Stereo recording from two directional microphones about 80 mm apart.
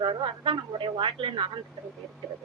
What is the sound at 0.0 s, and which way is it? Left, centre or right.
Speech, right.